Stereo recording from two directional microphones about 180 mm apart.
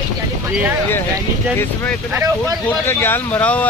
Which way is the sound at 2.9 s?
10° left (ahead or behind).